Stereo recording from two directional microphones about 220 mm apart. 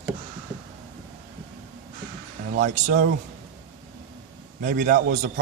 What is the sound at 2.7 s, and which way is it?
Speech, 35° right (ahead or behind).